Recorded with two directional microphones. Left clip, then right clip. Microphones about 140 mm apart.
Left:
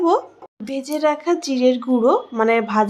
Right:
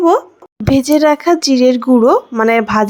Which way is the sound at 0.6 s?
65° right (ahead or behind).